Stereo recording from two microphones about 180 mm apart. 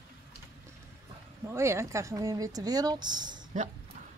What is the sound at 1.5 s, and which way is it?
Speech, 15° right (ahead or behind).